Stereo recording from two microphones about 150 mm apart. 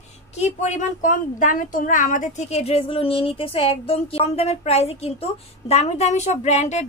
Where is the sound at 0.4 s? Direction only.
50° left (ahead or behind).